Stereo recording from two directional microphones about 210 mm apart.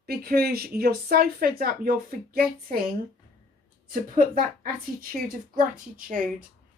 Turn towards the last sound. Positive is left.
turn(degrees=-40)  # may be behind; listen again after turning